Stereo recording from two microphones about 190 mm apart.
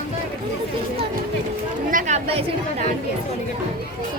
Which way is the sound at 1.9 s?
40° right (ahead or behind).